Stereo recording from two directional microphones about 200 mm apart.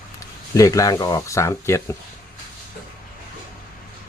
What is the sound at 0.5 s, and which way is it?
Speech, 15° left (ahead or behind).